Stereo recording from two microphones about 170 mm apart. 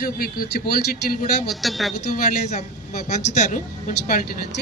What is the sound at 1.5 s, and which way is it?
Speech, centre (ahead or behind).